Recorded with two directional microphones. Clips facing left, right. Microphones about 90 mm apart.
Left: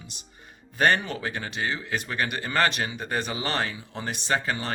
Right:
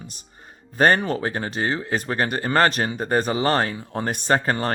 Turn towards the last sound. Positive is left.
turn(degrees=-45)  # may be behind; listen again after turning